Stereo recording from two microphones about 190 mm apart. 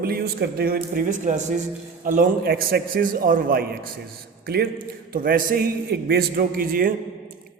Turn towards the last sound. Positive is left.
turn(degrees=-50)  # may be behind; listen again after turning